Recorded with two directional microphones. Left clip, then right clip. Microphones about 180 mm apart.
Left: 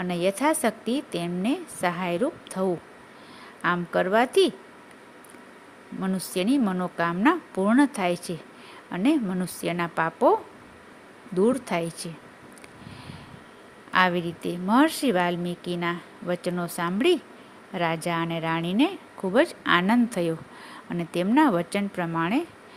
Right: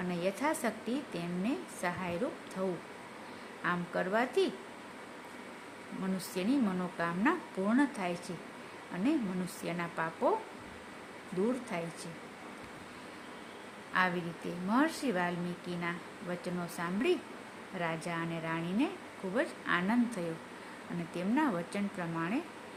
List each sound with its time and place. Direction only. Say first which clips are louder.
0.1 s speech: left 10 dB; 45° left (ahead or behind)
6.0 s speech: left 9 dB; 45° left (ahead or behind)
11.4 s speech: left 12 dB; 50° left (ahead or behind)
13.9 s speech: left 10 dB; 50° left (ahead or behind)